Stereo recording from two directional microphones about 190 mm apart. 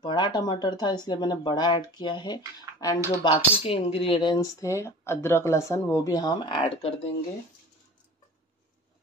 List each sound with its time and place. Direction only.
0.0 s speech: 25° left (ahead or behind)
6.5 s speech: 30° left (ahead or behind)